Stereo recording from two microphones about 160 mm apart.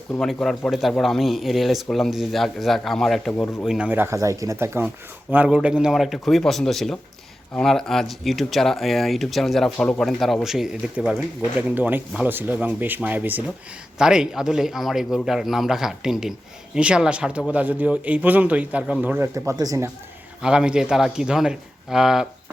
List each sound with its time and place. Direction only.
0.1 s speech: 5° left (ahead or behind); by 19.9 s 20° right (ahead or behind)
20.4 s speech: 5° right (ahead or behind)